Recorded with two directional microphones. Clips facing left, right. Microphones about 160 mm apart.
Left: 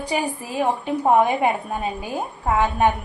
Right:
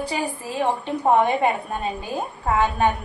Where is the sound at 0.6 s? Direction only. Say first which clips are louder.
Left 1 dB; 5° left (ahead or behind).